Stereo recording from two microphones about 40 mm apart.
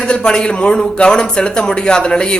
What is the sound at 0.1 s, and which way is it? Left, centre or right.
A man's voice, centre.